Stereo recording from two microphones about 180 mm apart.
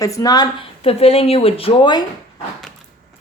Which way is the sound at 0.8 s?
35° left (ahead or behind).